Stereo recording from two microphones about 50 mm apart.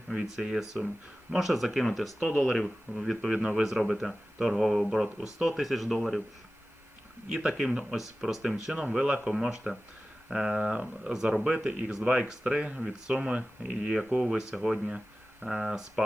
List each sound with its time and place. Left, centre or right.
0.1 s speech: centre
7.3 s speech: centre
9.2 s speech: centre